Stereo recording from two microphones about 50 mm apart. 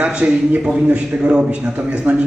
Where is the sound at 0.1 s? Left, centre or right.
Centre.